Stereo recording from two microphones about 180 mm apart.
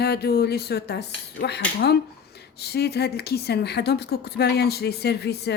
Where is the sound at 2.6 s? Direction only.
65° left (ahead or behind).